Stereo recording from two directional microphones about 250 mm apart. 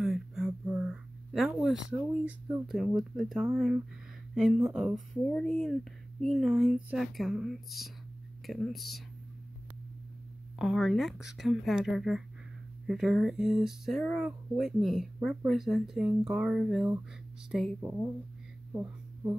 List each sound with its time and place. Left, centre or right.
0.0 s speech: centre
10.6 s speech: centre
18.7 s a sound: centre